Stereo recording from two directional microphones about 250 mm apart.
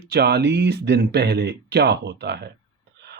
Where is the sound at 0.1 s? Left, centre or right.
Right.